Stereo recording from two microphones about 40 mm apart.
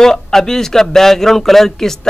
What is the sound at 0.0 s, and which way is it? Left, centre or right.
Speech, centre.